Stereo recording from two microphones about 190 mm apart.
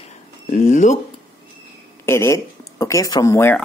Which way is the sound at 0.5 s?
40° left (ahead or behind).